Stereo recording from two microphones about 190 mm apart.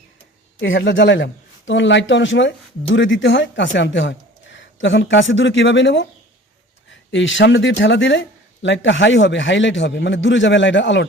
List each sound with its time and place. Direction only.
0.6 s speech: 75° left (ahead or behind)